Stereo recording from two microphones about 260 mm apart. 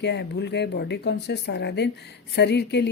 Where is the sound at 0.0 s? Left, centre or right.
Left.